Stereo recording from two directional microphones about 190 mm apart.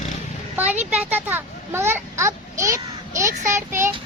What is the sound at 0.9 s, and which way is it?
A child's voice, 10° right (ahead or behind).